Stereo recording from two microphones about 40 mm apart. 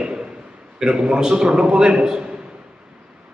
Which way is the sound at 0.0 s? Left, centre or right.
Right.